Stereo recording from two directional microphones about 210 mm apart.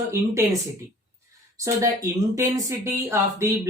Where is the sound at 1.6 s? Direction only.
15° right (ahead or behind).